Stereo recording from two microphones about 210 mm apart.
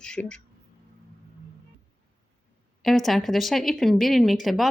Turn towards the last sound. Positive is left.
turn(degrees=0)  # may be behind; listen again after turning